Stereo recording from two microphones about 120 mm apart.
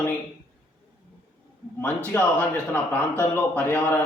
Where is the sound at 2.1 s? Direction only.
15° left (ahead or behind).